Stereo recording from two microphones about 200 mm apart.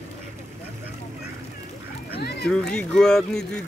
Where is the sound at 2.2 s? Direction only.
55° left (ahead or behind).